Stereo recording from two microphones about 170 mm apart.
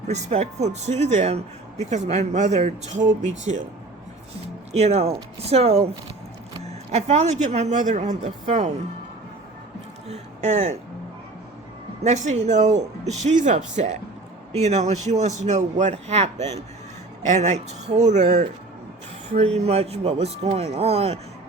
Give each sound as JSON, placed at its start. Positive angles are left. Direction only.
{"t": 0.1, "sound": "a man's voice", "side_deg": -40}
{"t": 4.7, "sound": "a man's voice", "side_deg": -40}
{"t": 6.9, "sound": "speech", "side_deg": -40}
{"t": 10.1, "sound": "speech", "side_deg": -45}
{"t": 12.0, "sound": "a man's voice", "side_deg": -45}
{"t": 19.6, "sound": "a man's voice", "side_deg": -40}